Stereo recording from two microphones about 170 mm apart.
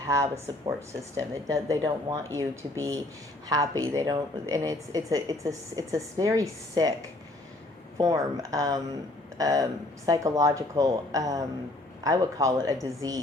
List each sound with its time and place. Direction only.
0.1 s a woman's voice: 20° right (ahead or behind)